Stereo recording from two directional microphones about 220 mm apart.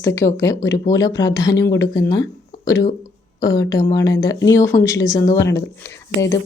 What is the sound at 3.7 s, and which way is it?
Speech, 15° left (ahead or behind).